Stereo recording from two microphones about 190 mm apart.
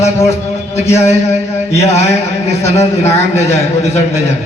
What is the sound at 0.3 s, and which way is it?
A man's voice, 35° left (ahead or behind).